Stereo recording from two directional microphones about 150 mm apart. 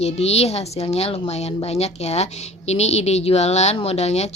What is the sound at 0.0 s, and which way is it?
Speech, 45° left (ahead or behind).